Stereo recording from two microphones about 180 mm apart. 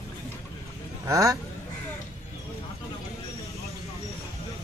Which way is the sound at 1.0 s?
20° right (ahead or behind).